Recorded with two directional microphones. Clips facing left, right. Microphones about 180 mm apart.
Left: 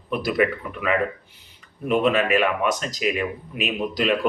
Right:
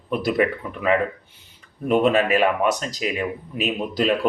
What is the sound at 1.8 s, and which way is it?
Speech, 40° right (ahead or behind).